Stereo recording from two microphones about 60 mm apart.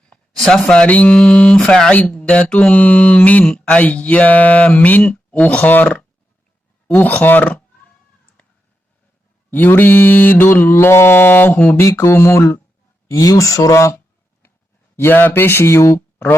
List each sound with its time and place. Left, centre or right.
0.3 s speech: centre
0.6 s speech: centre
1.9 s mantra: centre
9.5 s mantra: left
11.8 s speech: left
13.1 s speech: left
14.9 s mantra: left
15.8 s speech: left